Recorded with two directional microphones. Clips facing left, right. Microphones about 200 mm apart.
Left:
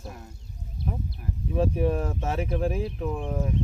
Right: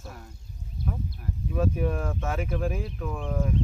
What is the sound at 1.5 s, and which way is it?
Speech, 30° left (ahead or behind).